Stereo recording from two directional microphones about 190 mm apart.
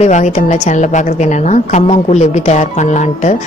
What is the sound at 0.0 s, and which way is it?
A woman's voice, 40° left (ahead or behind).